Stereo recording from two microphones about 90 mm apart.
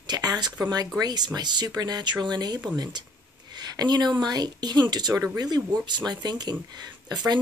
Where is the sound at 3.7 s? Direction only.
50° right (ahead or behind).